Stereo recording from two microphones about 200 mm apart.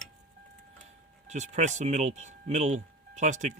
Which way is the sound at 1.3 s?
35° right (ahead or behind).